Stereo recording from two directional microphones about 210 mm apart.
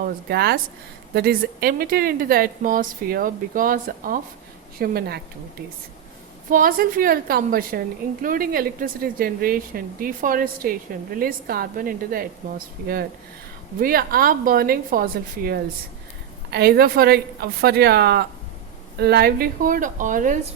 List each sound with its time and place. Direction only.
0.0 s a woman's voice: 50° right (ahead or behind)